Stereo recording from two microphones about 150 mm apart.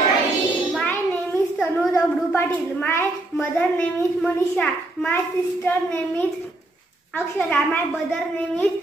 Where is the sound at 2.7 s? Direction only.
15° left (ahead or behind).